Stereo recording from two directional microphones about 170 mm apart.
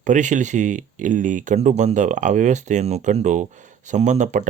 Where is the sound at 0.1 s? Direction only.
45° right (ahead or behind).